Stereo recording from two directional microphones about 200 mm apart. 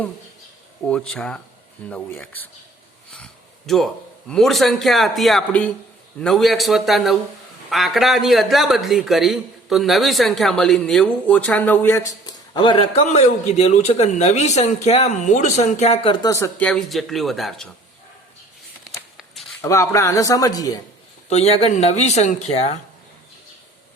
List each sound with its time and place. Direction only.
0.9 s speech: 5° left (ahead or behind)
3.7 s speech: centre (ahead or behind); by 16.1 s 30° left (ahead or behind)
16.2 s speech: 15° left (ahead or behind)
19.1 s a sound: centre (ahead or behind)
19.6 s speech: 15° left (ahead or behind)
21.2 s speech: 30° left (ahead or behind)